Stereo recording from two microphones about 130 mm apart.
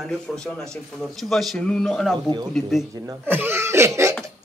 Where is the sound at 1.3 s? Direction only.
Centre (ahead or behind).